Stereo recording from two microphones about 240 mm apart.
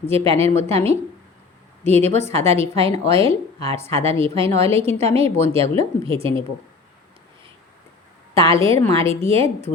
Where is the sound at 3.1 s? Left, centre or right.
Centre.